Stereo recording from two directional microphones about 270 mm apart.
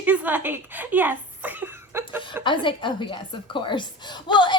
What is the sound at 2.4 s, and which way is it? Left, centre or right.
A woman's voice, centre.